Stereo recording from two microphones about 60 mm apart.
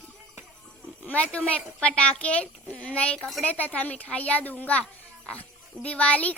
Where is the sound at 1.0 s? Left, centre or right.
Left.